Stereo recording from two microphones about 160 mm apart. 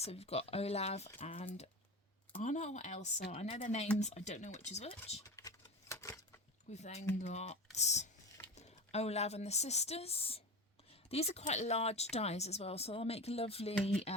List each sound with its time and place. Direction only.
0.0 s speech: 40° left (ahead or behind)
2.3 s speech: 50° left (ahead or behind)
5.2 s a sound: 20° left (ahead or behind)
6.7 s speech: 45° left (ahead or behind)